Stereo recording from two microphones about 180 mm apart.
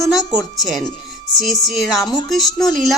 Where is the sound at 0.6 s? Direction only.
Centre (ahead or behind).